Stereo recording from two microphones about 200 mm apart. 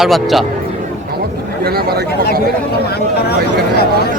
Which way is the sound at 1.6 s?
50° right (ahead or behind).